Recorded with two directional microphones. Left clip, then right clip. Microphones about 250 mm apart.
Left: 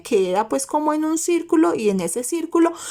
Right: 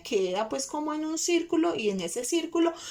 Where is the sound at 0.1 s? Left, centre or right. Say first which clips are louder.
Left 9 dB; left.